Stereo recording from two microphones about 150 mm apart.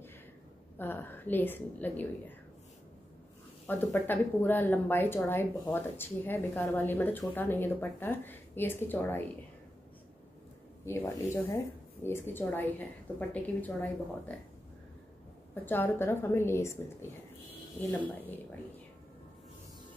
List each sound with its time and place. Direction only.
0.7 s speech: 15° left (ahead or behind)
3.6 s speech: 15° left (ahead or behind)
10.9 s speech: 20° left (ahead or behind)
15.5 s speech: 15° left (ahead or behind)